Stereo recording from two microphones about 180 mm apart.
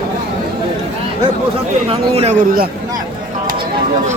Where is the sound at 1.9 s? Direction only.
35° right (ahead or behind).